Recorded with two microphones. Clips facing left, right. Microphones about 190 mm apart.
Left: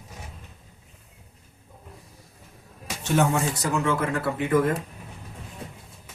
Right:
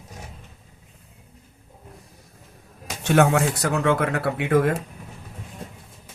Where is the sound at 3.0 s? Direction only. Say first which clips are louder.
Right 4 dB; 75° right (ahead or behind).